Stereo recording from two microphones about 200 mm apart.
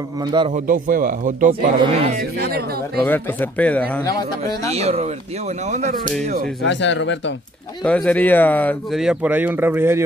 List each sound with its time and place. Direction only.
0.2 s speech: 20° right (ahead or behind)
0.5 s speech: 40° right (ahead or behind)
1.8 s speech: 30° right (ahead or behind)
2.1 s speech: 55° right (ahead or behind)
3.0 s speech: 10° left (ahead or behind)
4.2 s a man's voice: 20° left (ahead or behind)
4.7 s speech: 30° right (ahead or behind)
6.2 s speech: 50° right (ahead or behind)
6.6 s speech: 65° left (ahead or behind)
7.8 s speech: 5° left (ahead or behind); by 10.0 s 10° right (ahead or behind)